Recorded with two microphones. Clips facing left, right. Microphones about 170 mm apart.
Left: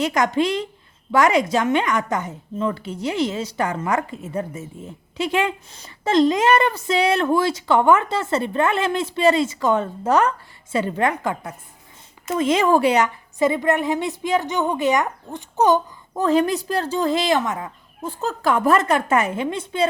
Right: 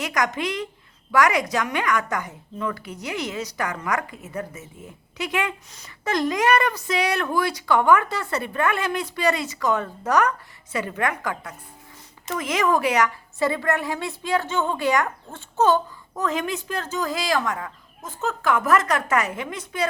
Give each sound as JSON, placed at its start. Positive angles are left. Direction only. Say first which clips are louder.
{"t": 0.0, "sound": "a woman's voice", "louder": "left 6 dB", "side_deg": 30}
{"t": 16.1, "sound": "a woman's voice", "louder": "left 7 dB", "side_deg": 30}